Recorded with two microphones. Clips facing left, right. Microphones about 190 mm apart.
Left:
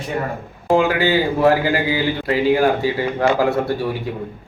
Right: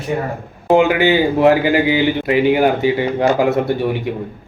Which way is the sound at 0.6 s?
20° right (ahead or behind).